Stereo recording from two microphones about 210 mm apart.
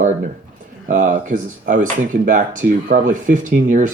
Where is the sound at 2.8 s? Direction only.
40° right (ahead or behind).